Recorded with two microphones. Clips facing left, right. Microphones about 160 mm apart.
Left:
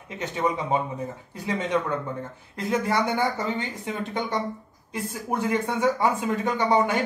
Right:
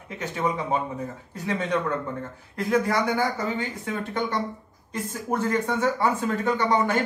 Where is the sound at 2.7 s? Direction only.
25° left (ahead or behind).